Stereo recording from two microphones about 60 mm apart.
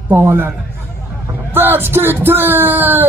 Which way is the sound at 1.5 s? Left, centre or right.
Right.